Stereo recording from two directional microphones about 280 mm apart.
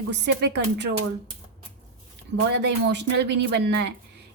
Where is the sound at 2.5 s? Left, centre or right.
Right.